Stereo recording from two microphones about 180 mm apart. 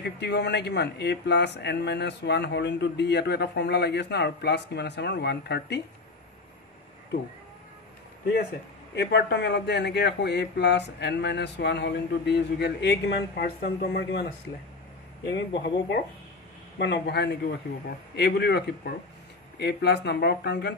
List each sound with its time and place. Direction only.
0.0 s speech: 70° left (ahead or behind)
8.9 s speech: 70° left (ahead or behind)
15.3 s a man's voice: 75° left (ahead or behind)